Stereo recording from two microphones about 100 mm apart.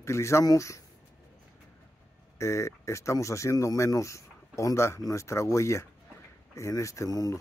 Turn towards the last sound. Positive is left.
turn(degrees=35)  # may be behind; listen again after turning